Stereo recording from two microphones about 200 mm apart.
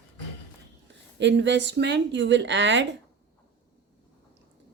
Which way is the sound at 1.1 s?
60° right (ahead or behind).